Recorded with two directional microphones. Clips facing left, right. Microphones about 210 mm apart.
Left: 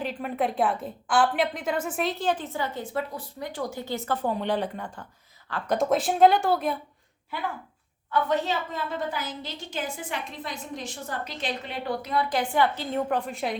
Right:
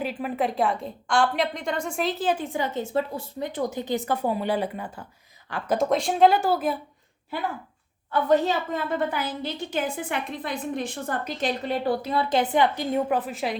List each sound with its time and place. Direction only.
0.0 s a woman's voice: 5° right (ahead or behind)
5.7 s speech: centre (ahead or behind)
8.1 s a woman's voice: 40° right (ahead or behind); by 13.6 s centre (ahead or behind)